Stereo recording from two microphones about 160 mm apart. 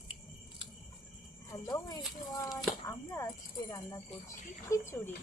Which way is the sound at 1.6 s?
25° left (ahead or behind).